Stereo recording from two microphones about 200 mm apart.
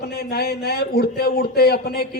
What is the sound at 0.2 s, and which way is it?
A man's voice, 50° left (ahead or behind).